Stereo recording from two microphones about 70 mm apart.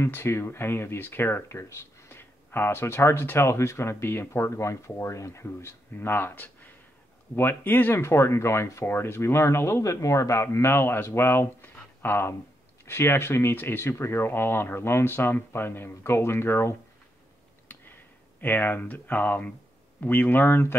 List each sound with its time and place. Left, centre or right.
0.0 s speech: left
17.7 s a sound: left
18.4 s speech: left